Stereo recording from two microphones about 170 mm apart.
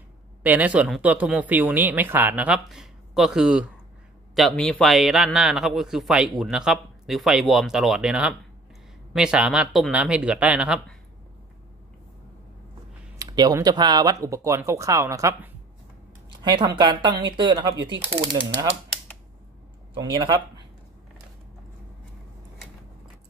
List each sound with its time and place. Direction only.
0.4 s a man's voice: 10° right (ahead or behind)
13.2 s speech: 20° right (ahead or behind)
19.9 s speech: 25° right (ahead or behind)